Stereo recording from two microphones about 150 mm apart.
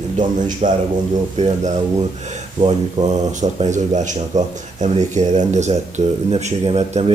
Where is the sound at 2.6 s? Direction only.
55° right (ahead or behind).